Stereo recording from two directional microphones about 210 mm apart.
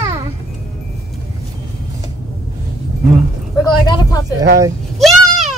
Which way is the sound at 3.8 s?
20° left (ahead or behind).